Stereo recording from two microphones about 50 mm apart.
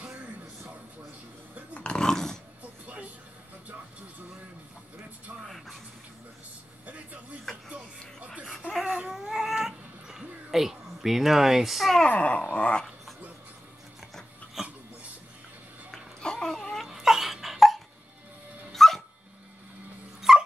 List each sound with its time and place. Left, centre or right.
1.7 s dog: left
2.0 s dog: centre
2.6 s music: right
8.8 s baby cry: right
9.1 s cat: centre
12.1 s speech: left
14.6 s a sound: centre
16.2 s babbling: centre
16.9 s a sound: centre
18.7 s dog: centre
20.2 s dog: centre